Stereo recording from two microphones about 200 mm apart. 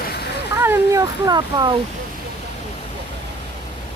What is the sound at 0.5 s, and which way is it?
Speech, 10° right (ahead or behind).